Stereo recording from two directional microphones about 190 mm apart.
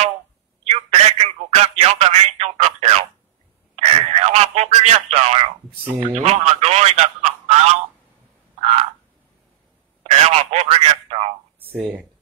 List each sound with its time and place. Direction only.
0.7 s telephone: 35° right (ahead or behind)
3.7 s radio: 30° right (ahead or behind)
6.1 s a man's voice: 35° right (ahead or behind)
10.0 s telephone: 35° right (ahead or behind)
11.8 s speech: 10° right (ahead or behind)